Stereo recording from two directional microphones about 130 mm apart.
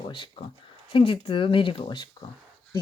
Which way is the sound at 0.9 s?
45° left (ahead or behind).